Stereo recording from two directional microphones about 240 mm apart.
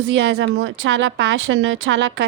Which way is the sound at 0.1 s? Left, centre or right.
Right.